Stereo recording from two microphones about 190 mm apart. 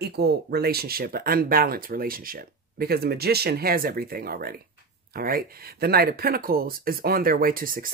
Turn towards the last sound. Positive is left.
turn(degrees=-45)  # may be behind; listen again after turning